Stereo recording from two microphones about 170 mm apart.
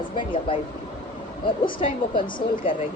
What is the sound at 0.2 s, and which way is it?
Speech, 30° left (ahead or behind).